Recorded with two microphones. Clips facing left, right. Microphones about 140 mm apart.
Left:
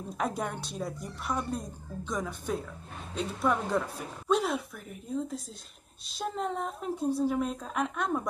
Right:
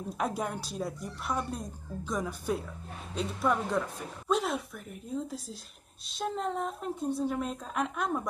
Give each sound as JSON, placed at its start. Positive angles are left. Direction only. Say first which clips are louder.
{"t": 0.2, "sound": "speech", "louder": "even", "side_deg": 0}
{"t": 4.3, "sound": "a sound", "louder": "left 2 dB", "side_deg": 0}
{"t": 6.0, "sound": "speech", "louder": "even", "side_deg": 0}